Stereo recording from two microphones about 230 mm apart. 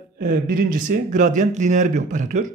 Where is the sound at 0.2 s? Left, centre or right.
Right.